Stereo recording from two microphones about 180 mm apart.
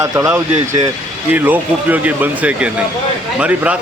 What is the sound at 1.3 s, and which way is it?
A man's voice, 10° right (ahead or behind).